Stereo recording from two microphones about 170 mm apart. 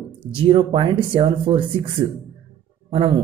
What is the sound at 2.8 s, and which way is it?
Speech, 30° right (ahead or behind).